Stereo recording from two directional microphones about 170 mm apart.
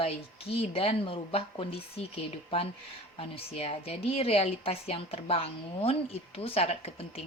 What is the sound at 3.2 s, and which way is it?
A woman's voice, 35° left (ahead or behind).